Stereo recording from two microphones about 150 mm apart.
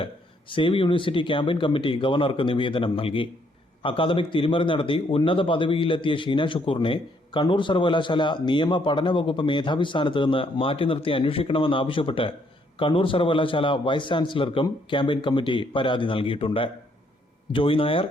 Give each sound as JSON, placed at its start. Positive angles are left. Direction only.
{"t": 0.0, "sound": "a man's voice", "side_deg": 35}